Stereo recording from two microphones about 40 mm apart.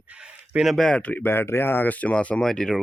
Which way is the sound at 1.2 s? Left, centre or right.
Left.